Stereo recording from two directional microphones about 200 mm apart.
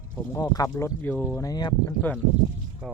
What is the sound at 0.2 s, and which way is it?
Speech, 15° left (ahead or behind).